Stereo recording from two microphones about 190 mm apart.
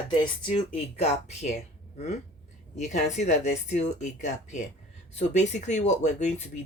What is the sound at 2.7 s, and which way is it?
Speech, 40° left (ahead or behind).